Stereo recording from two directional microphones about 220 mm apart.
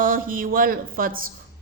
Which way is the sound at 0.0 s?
40° right (ahead or behind).